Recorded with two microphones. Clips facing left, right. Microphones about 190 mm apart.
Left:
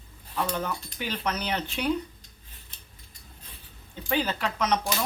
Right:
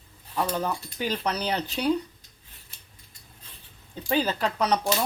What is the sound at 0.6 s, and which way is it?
Speech, 35° right (ahead or behind).